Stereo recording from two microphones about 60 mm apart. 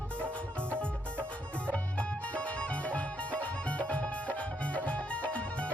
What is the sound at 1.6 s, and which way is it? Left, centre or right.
Music, left.